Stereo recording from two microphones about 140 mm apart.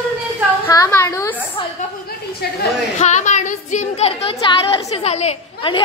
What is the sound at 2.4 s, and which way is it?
Speech, 90° left.